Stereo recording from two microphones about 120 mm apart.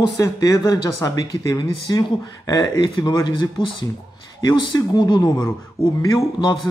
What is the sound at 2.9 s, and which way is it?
Speech, 40° left (ahead or behind).